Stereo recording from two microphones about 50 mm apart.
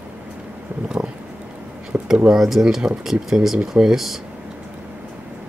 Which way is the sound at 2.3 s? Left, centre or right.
Centre.